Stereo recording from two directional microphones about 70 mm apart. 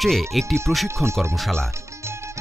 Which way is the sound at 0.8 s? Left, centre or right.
Right.